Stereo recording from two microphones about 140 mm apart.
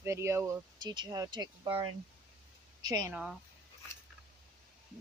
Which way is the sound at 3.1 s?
5° right (ahead or behind).